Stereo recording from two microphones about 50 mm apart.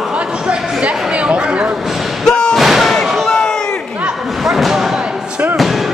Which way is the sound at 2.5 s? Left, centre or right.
Centre.